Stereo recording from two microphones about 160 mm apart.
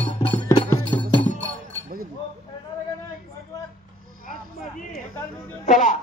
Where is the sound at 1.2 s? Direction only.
10° left (ahead or behind).